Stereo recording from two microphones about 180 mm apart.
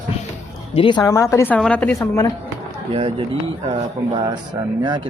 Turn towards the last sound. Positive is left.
turn(degrees=-25)  # may be behind; listen again after turning